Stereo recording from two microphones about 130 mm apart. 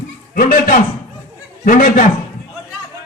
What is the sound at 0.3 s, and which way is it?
A man's voice, 90° left.